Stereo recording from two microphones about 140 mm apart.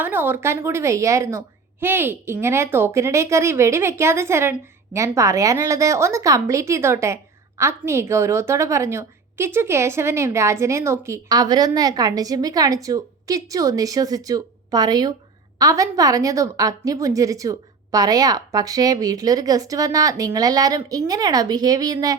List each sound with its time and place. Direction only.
0.0 s a woman's voice: 15° right (ahead or behind)